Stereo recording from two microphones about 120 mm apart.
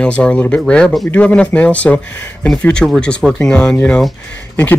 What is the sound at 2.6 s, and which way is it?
Speech, 5° left (ahead or behind).